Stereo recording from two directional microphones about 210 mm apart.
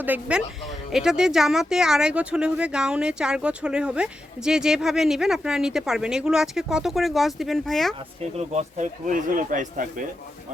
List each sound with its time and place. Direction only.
0.0 s speech: 5° right (ahead or behind)
8.2 s speech: 30° right (ahead or behind)